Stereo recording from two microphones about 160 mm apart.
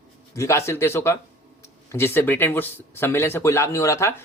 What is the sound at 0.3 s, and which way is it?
Speech, 15° left (ahead or behind).